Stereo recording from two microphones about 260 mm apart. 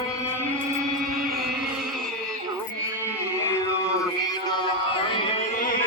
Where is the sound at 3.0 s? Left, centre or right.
Centre.